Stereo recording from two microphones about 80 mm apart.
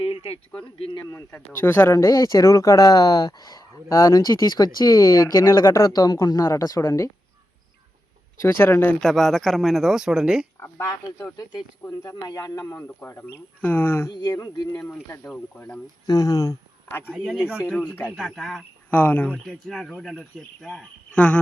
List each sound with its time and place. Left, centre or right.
1.1 s speech: left
5.9 s speech: left
8.4 s speech: left
9.0 s speech: centre
11.9 s speech: left
12.7 s speech: left
14.1 s speech: left
14.7 s speech: left
16.0 s speech: left
17.2 s speech: centre
17.8 s speech: left
18.3 s speech: centre
18.9 s speech: left
19.7 s speech: centre